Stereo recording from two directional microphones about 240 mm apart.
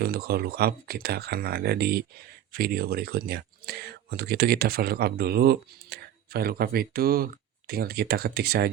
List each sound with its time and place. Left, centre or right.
0.0 s speech: right